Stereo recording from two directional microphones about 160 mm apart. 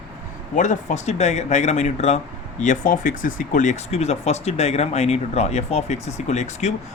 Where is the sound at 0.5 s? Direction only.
50° left (ahead or behind).